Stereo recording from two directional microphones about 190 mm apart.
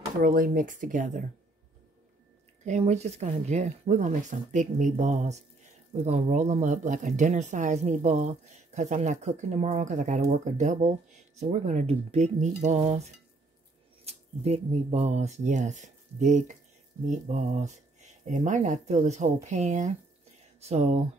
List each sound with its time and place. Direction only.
0.2 s speech: 45° right (ahead or behind)
2.6 s speech: 35° right (ahead or behind)